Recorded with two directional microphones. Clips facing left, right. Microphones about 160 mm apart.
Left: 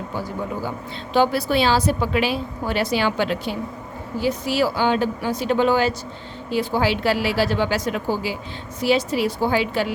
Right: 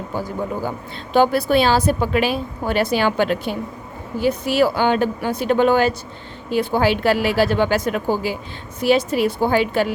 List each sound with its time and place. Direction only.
0.1 s a woman's voice: 45° right (ahead or behind)